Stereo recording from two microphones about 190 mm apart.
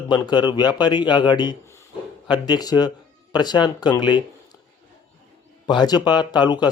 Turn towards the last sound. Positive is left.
turn(degrees=20)  # may be behind; listen again after turning